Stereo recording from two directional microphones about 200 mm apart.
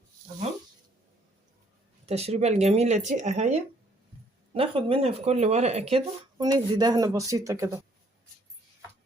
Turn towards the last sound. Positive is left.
turn(degrees=-15)  # may be behind; listen again after turning